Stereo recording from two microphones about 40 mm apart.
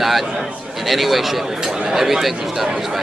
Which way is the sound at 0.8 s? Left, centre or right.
Centre.